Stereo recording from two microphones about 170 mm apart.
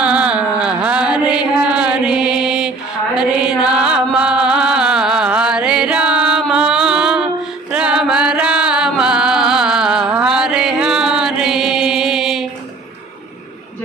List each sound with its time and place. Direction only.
0.0 s a sound: 5° right (ahead or behind)
3.2 s chant: 5° right (ahead or behind)
7.7 s music: 5° right (ahead or behind)